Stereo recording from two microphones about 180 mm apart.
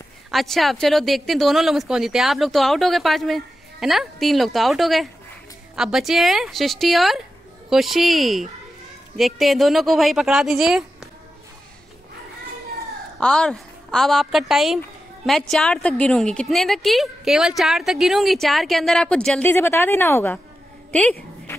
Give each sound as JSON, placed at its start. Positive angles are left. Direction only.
{"t": 0.3, "sound": "a woman's voice", "side_deg": 0}
{"t": 13.2, "sound": "a woman's voice", "side_deg": 5}